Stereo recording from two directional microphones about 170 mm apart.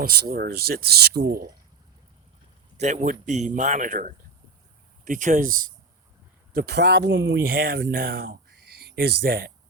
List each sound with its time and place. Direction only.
0.0 s speech: 60° right (ahead or behind)
2.7 s speech: 45° right (ahead or behind)
6.5 s speech: 65° right (ahead or behind)